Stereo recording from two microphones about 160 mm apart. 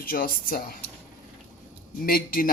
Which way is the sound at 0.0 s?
65° left (ahead or behind).